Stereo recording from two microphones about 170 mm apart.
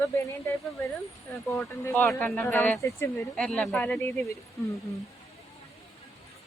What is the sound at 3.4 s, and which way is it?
Speech, 5° left (ahead or behind).